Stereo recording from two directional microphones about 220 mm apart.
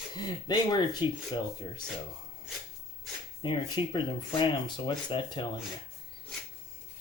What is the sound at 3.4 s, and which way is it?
Speech, 20° left (ahead or behind).